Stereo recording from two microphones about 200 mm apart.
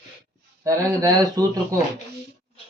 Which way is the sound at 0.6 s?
15° right (ahead or behind).